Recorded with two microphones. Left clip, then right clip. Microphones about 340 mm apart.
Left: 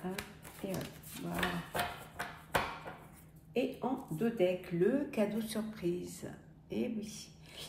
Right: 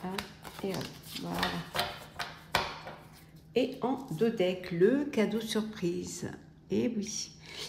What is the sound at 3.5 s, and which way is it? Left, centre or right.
Speech, right.